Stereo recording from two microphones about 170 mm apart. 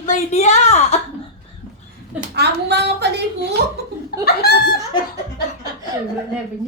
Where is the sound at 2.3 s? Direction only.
75° right (ahead or behind).